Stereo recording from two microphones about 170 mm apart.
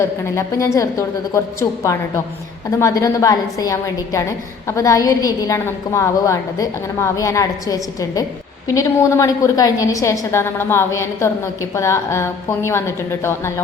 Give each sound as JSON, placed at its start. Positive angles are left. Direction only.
{"t": 0.0, "sound": "a woman's voice", "side_deg": 15}